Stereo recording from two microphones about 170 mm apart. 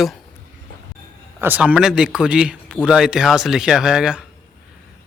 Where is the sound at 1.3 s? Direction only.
10° right (ahead or behind).